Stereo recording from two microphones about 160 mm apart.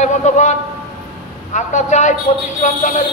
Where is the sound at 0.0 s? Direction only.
50° left (ahead or behind).